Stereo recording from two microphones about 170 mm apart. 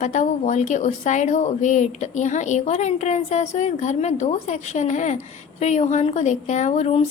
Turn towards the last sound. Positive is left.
turn(degrees=40)  # may be behind; listen again after turning